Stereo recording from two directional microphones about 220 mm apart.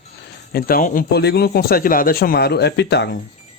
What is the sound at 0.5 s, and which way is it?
Speech, 40° left (ahead or behind).